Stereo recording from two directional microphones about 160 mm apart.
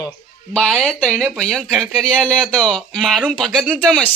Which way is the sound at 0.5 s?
Centre (ahead or behind).